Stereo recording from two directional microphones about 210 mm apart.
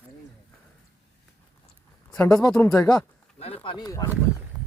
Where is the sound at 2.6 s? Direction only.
15° left (ahead or behind).